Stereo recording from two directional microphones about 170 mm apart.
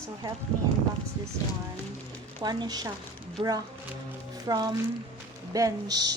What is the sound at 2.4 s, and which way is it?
Speech, 25° right (ahead or behind).